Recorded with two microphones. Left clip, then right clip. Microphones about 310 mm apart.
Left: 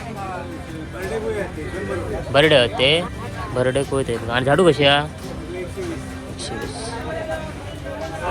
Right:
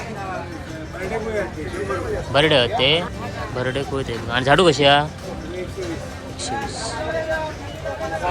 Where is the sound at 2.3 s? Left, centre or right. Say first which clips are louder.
Left 2 dB; centre.